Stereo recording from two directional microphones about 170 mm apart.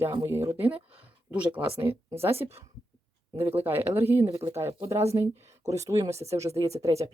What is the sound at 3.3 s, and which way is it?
Speech, 15° right (ahead or behind).